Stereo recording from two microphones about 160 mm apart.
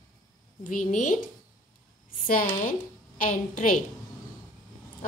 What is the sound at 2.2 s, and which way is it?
A woman's voice, 60° left (ahead or behind).